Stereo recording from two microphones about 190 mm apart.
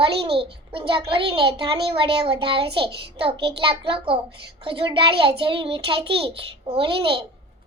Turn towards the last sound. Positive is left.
turn(degrees=-25)  # may be behind; listen again after turning